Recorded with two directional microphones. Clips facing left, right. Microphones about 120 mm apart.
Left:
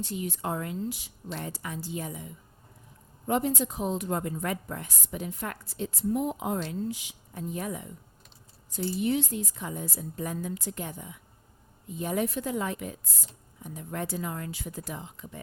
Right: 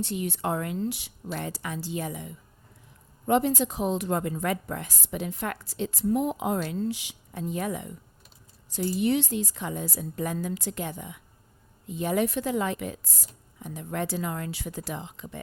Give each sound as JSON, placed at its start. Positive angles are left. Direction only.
{"t": 0.0, "sound": "a woman's voice", "side_deg": -70}